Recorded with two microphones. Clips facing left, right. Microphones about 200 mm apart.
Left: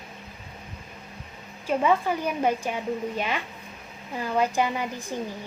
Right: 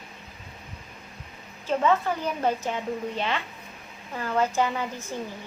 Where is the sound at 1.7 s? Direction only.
10° left (ahead or behind).